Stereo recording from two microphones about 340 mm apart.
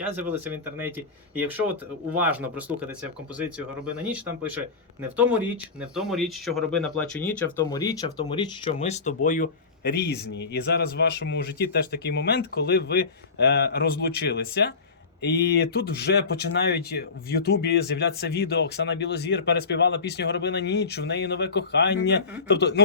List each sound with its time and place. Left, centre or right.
0.3 s speech: centre
3.9 s speech: centre; by 22.8 s left